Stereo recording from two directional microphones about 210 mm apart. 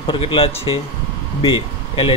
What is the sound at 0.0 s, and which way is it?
Speech, 25° left (ahead or behind).